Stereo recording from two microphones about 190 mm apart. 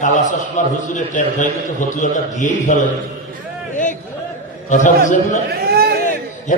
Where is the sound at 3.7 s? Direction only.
40° left (ahead or behind).